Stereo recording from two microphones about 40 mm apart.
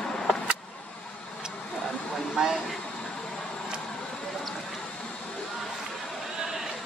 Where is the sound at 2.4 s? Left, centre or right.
Centre.